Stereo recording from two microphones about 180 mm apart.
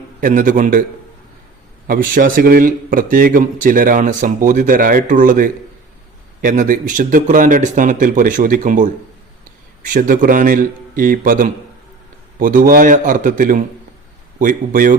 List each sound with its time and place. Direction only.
0.2 s a man's voice: 50° right (ahead or behind)
1.9 s a man's voice: 50° right (ahead or behind)